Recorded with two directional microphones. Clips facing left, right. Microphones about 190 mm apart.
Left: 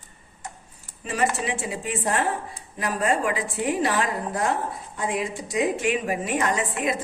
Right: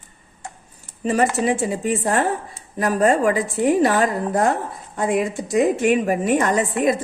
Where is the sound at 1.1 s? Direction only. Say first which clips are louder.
Right 6 dB; 45° right (ahead or behind).